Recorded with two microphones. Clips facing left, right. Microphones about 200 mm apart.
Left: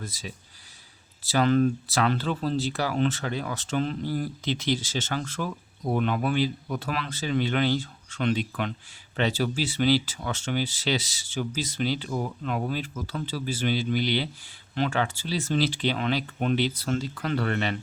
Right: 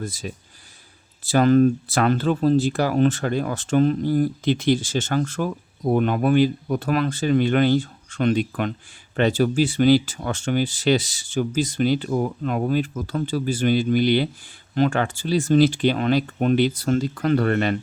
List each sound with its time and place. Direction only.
0.0 s speech: 50° right (ahead or behind)